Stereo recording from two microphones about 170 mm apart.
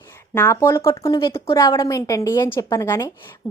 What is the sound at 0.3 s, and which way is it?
A woman's voice, 15° left (ahead or behind).